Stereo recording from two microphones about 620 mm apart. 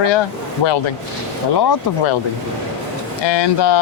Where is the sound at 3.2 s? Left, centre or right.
Left.